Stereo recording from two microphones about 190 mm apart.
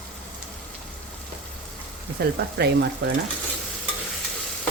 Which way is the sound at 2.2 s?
55° right (ahead or behind).